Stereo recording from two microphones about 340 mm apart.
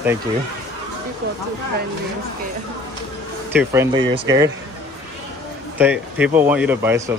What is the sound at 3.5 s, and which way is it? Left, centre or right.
Speech, centre.